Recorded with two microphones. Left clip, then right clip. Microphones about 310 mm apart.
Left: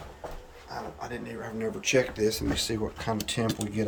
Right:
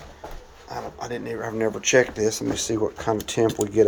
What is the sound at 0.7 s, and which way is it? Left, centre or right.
Speech, right.